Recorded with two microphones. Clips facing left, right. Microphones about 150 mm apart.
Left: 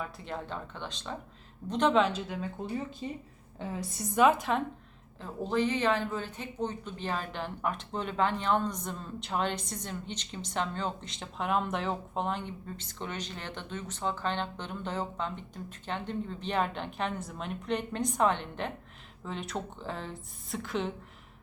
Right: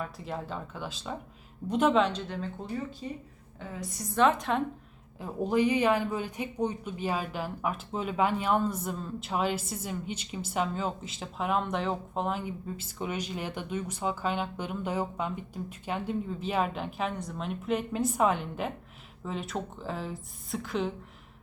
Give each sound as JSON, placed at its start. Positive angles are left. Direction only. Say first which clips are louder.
{"t": 0.0, "sound": "speech", "louder": "right 2 dB", "side_deg": 0}
{"t": 3.0, "sound": "speech", "louder": "even", "side_deg": 20}
{"t": 4.1, "sound": "a woman's voice", "louder": "even", "side_deg": 10}
{"t": 5.2, "sound": "speech", "louder": "right 3 dB", "side_deg": -10}